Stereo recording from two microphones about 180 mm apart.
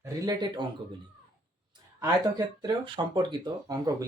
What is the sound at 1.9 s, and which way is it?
Speech, 20° right (ahead or behind).